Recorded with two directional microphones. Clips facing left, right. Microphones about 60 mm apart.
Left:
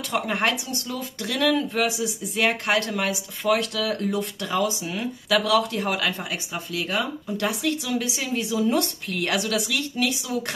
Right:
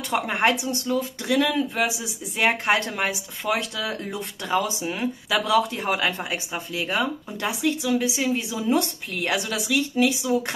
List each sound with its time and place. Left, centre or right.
0.1 s a woman's voice: right
2.4 s speech: right
7.4 s a woman's voice: centre